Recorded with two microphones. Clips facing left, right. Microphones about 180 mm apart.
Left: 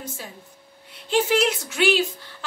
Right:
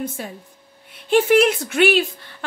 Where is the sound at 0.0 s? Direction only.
55° right (ahead or behind).